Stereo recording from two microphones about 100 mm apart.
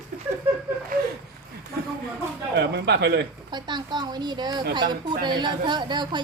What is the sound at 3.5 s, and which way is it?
A woman's voice, 45° right (ahead or behind).